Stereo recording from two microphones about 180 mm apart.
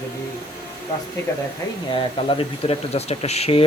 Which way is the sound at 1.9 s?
30° left (ahead or behind).